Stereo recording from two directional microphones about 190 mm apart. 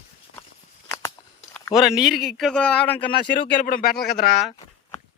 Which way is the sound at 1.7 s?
Centre (ahead or behind).